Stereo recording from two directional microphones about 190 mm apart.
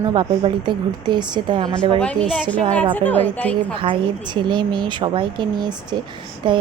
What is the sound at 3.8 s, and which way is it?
A woman's voice, 25° right (ahead or behind).